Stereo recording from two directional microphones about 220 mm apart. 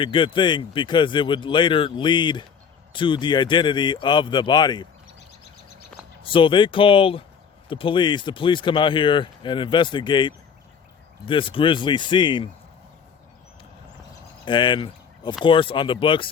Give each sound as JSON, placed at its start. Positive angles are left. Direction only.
{"t": 0.0, "sound": "speech", "side_deg": 20}
{"t": 6.2, "sound": "speech", "side_deg": 25}
{"t": 14.4, "sound": "speech", "side_deg": 20}